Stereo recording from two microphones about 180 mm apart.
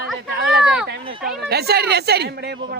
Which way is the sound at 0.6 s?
5° right (ahead or behind).